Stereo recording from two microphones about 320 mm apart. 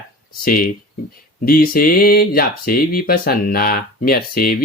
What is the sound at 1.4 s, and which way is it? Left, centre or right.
Speech, left.